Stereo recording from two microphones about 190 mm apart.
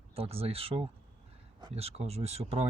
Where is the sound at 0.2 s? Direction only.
30° right (ahead or behind).